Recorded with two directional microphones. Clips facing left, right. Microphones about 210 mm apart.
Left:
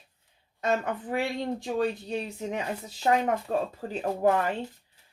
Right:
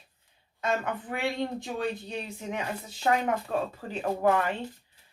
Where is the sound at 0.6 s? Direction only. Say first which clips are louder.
Left 2 dB; 40° left (ahead or behind).